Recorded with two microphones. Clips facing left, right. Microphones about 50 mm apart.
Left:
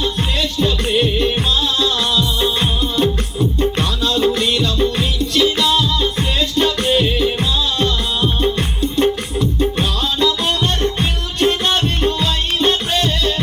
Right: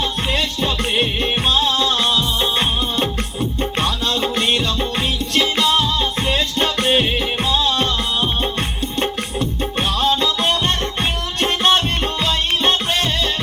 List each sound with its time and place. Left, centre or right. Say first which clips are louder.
0.0 s music: left 1 dB; right